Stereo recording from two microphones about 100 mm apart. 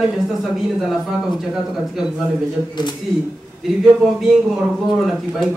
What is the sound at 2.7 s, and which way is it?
Speech, 45° left (ahead or behind).